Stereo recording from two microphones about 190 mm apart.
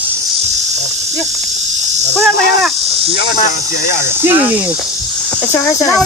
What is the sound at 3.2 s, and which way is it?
Speech, 50° left (ahead or behind).